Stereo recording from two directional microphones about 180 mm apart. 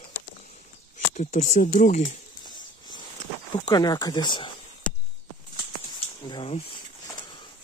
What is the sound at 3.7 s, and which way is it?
Speech, 20° left (ahead or behind).